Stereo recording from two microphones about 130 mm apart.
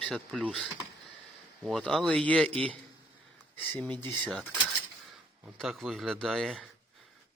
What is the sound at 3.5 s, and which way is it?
Speech, 15° left (ahead or behind).